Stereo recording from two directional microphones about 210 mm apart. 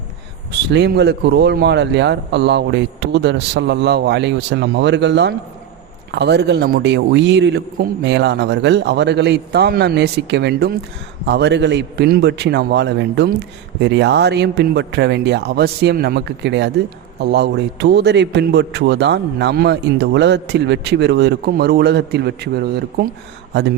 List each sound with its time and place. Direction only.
0.7 s a man's voice: 50° right (ahead or behind)